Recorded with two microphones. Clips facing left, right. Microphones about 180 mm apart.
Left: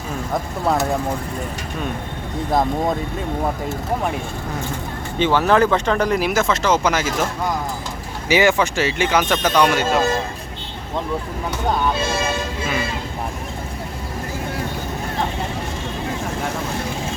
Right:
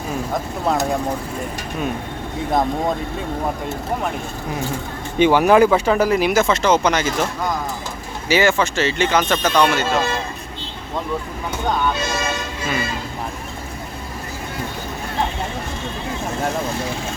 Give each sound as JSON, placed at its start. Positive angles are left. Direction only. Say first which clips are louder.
{"t": 0.7, "sound": "speech", "louder": "even", "side_deg": 0}
{"t": 5.2, "sound": "speech", "louder": "right 3 dB", "side_deg": -15}
{"t": 8.3, "sound": "speech", "louder": "left 1 dB", "side_deg": 15}
{"t": 11.9, "sound": "toot", "louder": "left 2 dB", "side_deg": 30}